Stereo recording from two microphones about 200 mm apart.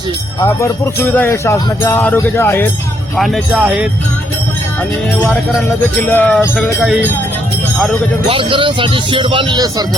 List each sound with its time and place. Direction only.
0.4 s speech: 10° left (ahead or behind)
3.2 s speech: centre (ahead or behind)
5.2 s speech: 10° left (ahead or behind)
8.3 s speech: 25° right (ahead or behind)